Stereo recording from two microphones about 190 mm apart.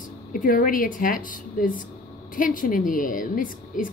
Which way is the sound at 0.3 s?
45° left (ahead or behind).